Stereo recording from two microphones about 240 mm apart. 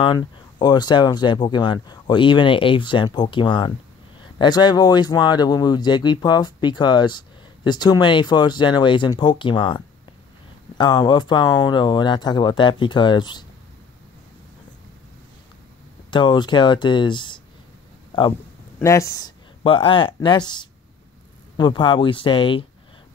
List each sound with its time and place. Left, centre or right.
0.0 s speech: centre
16.1 s speech: centre